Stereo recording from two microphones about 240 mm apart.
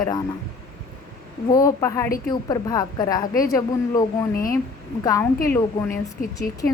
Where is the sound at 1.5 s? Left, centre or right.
Centre.